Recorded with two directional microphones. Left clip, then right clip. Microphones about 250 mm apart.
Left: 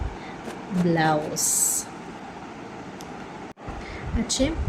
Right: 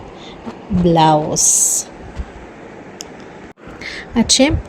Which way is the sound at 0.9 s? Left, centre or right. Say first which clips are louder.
Right 11 dB; right.